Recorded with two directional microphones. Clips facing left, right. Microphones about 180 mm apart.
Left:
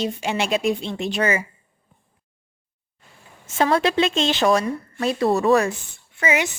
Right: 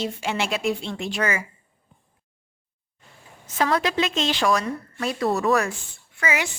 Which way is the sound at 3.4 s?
25° left (ahead or behind).